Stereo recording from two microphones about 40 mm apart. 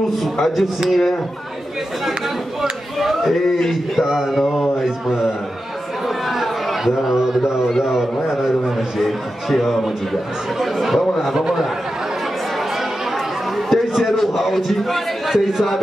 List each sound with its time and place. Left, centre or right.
0.1 s a man's voice: centre
3.0 s a sound: centre
4.0 s a man's voice: centre
4.8 s a man's voice: centre
6.0 s chatter: centre
7.7 s a man's voice: centre
8.9 s a man's voice: centre
11.3 s a man's voice: centre
13.6 s a sound: centre